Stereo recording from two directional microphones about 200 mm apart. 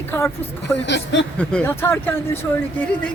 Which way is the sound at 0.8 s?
60° left (ahead or behind).